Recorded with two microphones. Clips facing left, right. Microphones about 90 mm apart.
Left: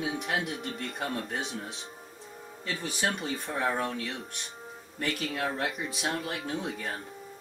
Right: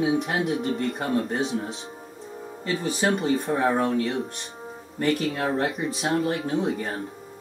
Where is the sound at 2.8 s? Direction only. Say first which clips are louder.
Right 8 dB; 40° right (ahead or behind).